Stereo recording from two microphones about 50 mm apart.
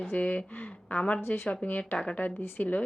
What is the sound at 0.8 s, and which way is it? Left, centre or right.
Speech, left.